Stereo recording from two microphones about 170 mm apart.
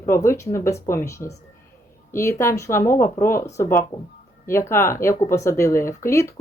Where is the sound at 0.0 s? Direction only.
15° left (ahead or behind).